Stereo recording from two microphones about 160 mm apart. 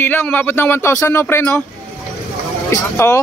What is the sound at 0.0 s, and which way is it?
Speech, 10° left (ahead or behind).